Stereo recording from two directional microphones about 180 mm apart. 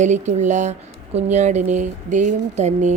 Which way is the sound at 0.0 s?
40° right (ahead or behind).